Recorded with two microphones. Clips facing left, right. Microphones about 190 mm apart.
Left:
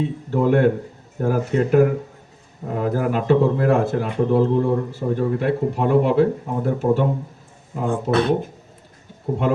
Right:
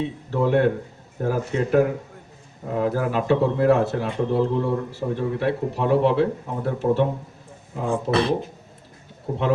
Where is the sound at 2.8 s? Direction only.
50° left (ahead or behind).